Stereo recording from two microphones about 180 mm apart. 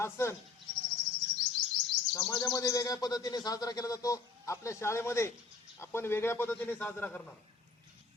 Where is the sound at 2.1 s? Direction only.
25° left (ahead or behind).